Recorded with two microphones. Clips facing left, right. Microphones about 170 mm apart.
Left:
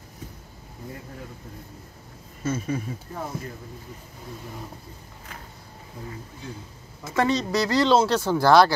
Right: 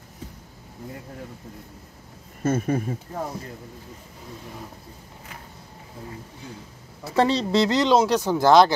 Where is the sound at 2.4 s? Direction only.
55° right (ahead or behind).